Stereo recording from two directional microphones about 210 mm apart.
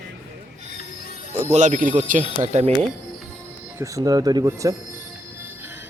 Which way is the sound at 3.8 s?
15° right (ahead or behind).